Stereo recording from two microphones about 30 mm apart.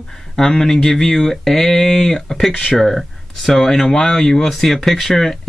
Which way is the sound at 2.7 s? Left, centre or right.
Centre.